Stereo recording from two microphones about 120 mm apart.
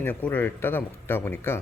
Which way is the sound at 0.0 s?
15° left (ahead or behind).